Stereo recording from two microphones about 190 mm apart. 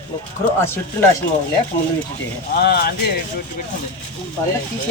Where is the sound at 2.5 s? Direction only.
55° left (ahead or behind).